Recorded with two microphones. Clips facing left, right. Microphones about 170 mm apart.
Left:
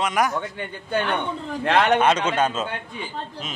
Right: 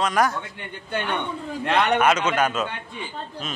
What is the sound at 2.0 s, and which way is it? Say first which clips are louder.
Speech: even; 30° left (ahead or behind).